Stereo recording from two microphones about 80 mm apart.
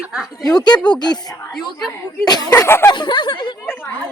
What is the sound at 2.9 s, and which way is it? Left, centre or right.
Speech, left.